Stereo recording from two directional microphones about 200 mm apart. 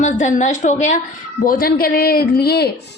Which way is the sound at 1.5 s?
45° left (ahead or behind).